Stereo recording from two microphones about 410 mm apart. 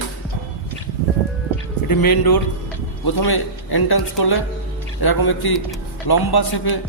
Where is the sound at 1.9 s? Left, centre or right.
Left.